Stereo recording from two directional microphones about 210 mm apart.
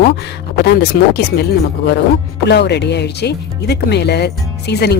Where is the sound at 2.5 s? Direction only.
55° left (ahead or behind).